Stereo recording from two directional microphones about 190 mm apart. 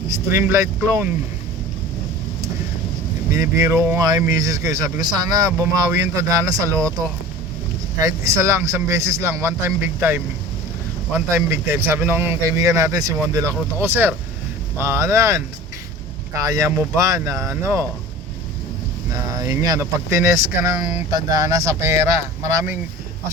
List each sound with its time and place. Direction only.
0.1 s speech: 15° right (ahead or behind)
3.3 s speech: 15° right (ahead or behind)
8.0 s speech: 15° right (ahead or behind)
11.3 s speech: 15° right (ahead or behind)
16.4 s speech: 15° right (ahead or behind)
19.1 s speech: 15° right (ahead or behind)